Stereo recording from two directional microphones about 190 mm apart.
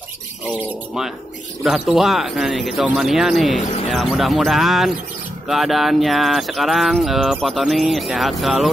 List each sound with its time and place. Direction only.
1.6 s speech: centre (ahead or behind)